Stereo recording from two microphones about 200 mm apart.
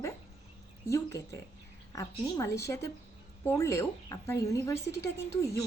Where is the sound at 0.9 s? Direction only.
15° left (ahead or behind).